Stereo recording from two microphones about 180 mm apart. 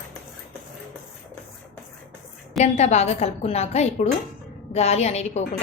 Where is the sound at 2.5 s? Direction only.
40° left (ahead or behind).